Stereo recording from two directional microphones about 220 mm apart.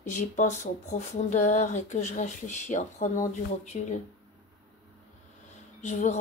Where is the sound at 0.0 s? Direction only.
30° left (ahead or behind).